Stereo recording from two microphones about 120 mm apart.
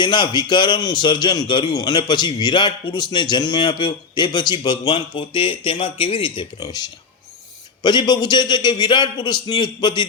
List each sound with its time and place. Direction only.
0.0 s a man's voice: 40° left (ahead or behind)
6.6 s a man's voice: 35° left (ahead or behind)